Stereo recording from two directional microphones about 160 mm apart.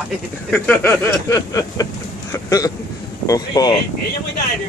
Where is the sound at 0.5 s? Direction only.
10° left (ahead or behind).